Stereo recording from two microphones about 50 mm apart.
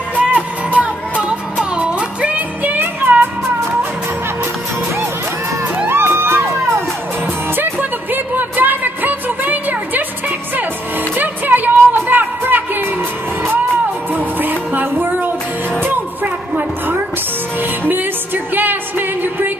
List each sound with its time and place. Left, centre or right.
0.3 s music: right
1.6 s music: right
5.9 s music: right
7.5 s music: right
11.1 s music: right
14.1 s music: right
16.5 s a sound: right
17.6 s music: right